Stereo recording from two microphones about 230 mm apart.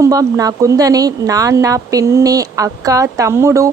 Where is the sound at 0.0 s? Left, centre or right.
Centre.